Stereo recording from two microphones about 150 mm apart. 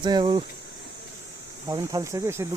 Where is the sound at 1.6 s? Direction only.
25° right (ahead or behind).